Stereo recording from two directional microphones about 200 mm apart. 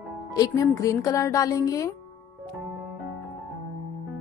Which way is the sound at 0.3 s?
20° left (ahead or behind).